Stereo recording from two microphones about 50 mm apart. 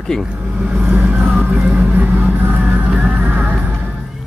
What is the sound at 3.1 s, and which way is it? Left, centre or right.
Music, right.